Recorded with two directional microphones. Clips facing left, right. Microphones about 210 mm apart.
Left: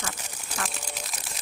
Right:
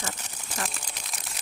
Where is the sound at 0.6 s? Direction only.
Centre (ahead or behind).